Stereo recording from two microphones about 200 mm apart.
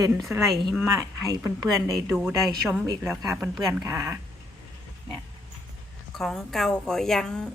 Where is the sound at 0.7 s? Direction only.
10° right (ahead or behind).